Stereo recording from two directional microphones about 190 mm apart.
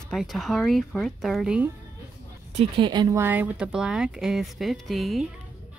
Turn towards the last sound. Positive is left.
turn(degrees=0)  # may be behind; listen again after turning